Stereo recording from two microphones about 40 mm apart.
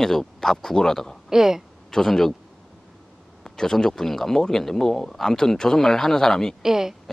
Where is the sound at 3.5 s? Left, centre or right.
Centre.